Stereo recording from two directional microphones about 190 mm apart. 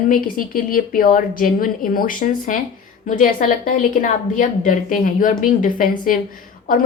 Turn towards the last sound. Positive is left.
turn(degrees=45)  # may be behind; listen again after turning